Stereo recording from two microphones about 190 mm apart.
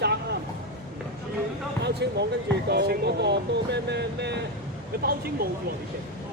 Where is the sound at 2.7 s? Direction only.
60° right (ahead or behind).